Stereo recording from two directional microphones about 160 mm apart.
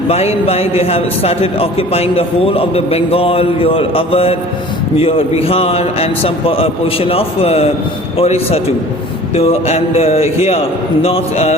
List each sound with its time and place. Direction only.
0.1 s a man's voice: 40° left (ahead or behind)